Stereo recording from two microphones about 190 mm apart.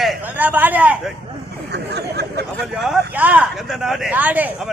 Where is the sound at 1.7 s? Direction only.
60° right (ahead or behind).